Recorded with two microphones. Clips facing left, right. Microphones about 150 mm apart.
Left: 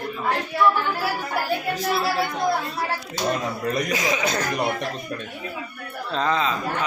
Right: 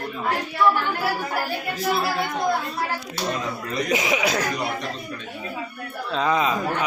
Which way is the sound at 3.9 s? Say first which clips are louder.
Right 2 dB; 15° right (ahead or behind).